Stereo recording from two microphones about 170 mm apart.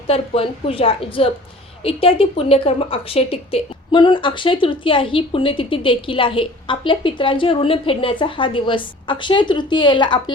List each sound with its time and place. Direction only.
0.1 s speech: 35° left (ahead or behind)